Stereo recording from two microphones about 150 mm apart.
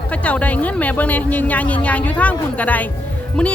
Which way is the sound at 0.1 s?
10° left (ahead or behind).